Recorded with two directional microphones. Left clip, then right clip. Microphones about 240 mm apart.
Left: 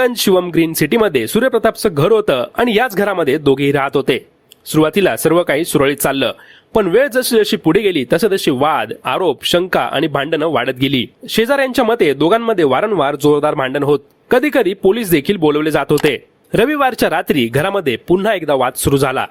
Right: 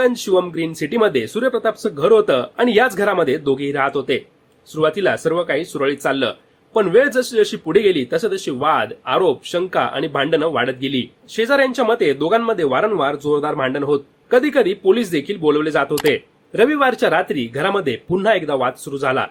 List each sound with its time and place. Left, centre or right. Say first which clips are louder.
0.0 s speech: left 3 dB; left